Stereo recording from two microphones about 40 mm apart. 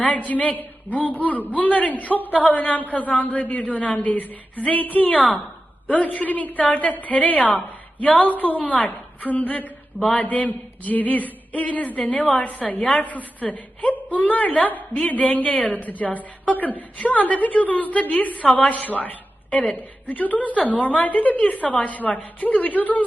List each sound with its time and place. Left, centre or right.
0.0 s a man's voice: left